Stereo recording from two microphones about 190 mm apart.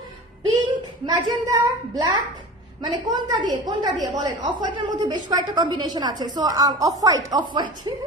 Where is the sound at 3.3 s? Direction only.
25° right (ahead or behind).